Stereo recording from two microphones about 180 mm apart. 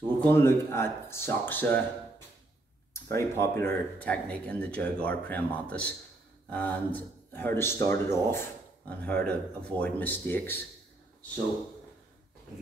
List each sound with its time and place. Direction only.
0.2 s speech: 15° left (ahead or behind)
2.9 s speech: 15° left (ahead or behind)